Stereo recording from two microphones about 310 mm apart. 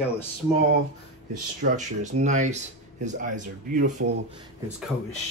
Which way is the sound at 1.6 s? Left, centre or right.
Right.